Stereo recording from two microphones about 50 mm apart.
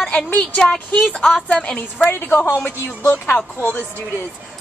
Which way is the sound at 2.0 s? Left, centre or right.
Left.